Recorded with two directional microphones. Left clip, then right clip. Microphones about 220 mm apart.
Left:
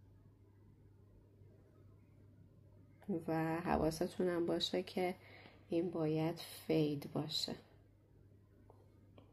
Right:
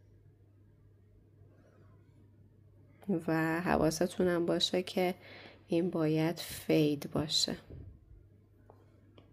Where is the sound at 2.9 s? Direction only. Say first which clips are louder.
Right 7 dB; 35° right (ahead or behind).